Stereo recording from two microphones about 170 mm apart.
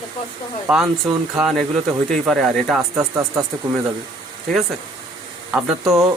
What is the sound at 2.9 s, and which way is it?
Speech, 15° right (ahead or behind).